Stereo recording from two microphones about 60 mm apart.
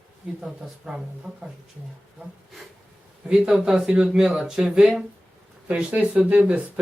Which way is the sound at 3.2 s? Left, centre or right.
Centre.